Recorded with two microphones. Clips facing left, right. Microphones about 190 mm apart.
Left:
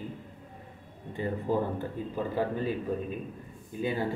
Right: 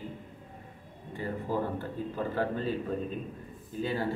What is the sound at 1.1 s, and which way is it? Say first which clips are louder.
Speech: left 3 dB; 20° left (ahead or behind).